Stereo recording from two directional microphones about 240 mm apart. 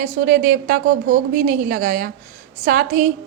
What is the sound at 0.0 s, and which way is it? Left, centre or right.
A woman's voice, right.